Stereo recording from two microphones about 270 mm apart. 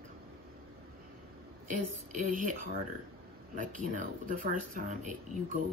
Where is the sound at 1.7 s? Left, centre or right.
Right.